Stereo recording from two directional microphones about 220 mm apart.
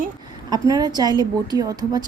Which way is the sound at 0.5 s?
15° right (ahead or behind).